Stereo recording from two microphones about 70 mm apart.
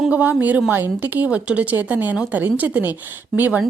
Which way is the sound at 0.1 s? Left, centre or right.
Right.